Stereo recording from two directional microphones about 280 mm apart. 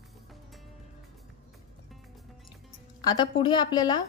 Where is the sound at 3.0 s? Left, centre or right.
Centre.